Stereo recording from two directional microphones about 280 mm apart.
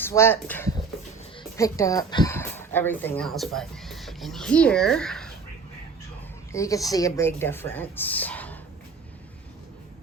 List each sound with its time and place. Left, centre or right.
0.0 s speech: centre
6.5 s speech: centre